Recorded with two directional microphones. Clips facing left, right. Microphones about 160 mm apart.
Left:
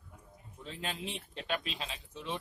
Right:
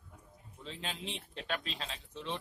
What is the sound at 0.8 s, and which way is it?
Speech, 5° left (ahead or behind).